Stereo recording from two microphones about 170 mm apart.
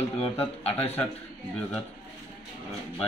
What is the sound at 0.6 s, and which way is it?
Speech, 35° left (ahead or behind).